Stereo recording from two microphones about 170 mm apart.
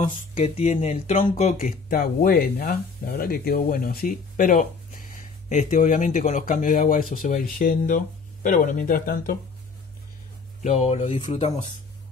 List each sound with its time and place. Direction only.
0.3 s speech: 45° left (ahead or behind)
1.9 s speech: 60° left (ahead or behind)
10.6 s speech: 45° left (ahead or behind)